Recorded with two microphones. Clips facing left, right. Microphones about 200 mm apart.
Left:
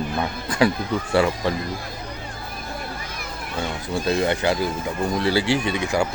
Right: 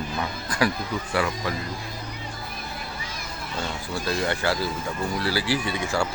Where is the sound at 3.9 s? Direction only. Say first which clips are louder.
Left 6 dB; 20° left (ahead or behind).